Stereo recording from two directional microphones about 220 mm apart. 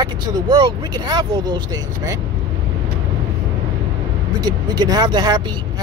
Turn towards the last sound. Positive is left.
turn(degrees=-20)  # may be behind; listen again after turning